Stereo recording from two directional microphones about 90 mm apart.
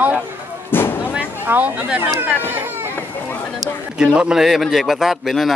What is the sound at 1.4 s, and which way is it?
Speech, 20° right (ahead or behind).